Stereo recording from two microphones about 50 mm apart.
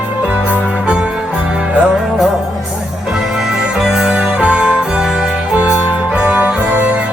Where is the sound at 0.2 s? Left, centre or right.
Right.